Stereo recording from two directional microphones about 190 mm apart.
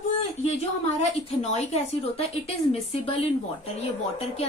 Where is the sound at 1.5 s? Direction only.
35° left (ahead or behind).